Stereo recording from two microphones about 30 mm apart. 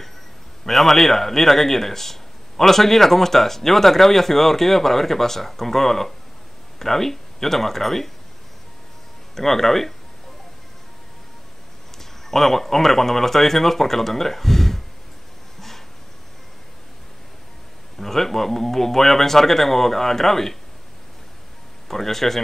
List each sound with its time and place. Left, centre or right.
0.7 s speech: centre
9.3 s speech: centre
12.0 s speech: centre
17.9 s speech: centre
21.8 s speech: centre